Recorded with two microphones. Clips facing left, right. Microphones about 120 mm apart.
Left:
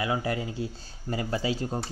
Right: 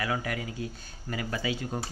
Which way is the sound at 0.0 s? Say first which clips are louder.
Left 3 dB; 25° left (ahead or behind).